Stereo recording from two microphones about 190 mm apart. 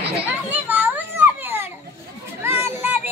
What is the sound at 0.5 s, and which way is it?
Children playing, 10° right (ahead or behind).